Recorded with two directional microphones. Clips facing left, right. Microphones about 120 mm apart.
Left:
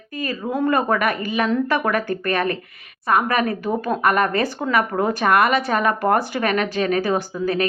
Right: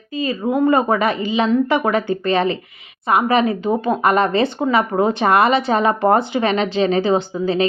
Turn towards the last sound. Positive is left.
turn(degrees=-25)  # may be behind; listen again after turning